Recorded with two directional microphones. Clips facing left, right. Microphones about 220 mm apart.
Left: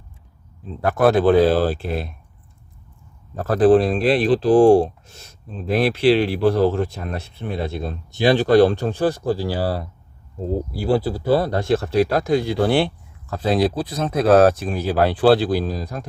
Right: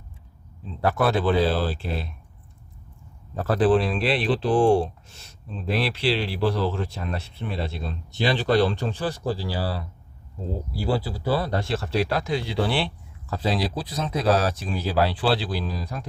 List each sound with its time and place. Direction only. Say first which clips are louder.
0.9 s speech: left 8 dB; 45° left (ahead or behind)
3.6 s speech: left 7 dB; 45° left (ahead or behind)